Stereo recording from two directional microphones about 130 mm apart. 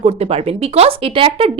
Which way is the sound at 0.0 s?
50° right (ahead or behind).